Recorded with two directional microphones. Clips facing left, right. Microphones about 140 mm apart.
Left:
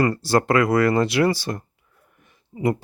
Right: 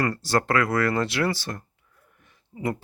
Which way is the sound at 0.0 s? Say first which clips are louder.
Left 5 dB; 15° left (ahead or behind).